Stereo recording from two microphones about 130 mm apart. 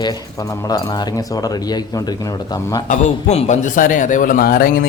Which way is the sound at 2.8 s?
65° left (ahead or behind).